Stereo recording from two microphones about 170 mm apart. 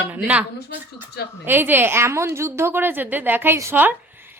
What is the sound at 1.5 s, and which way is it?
A woman's voice, 10° right (ahead or behind).